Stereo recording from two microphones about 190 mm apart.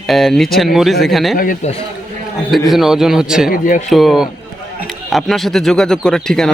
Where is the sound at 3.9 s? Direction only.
Centre (ahead or behind).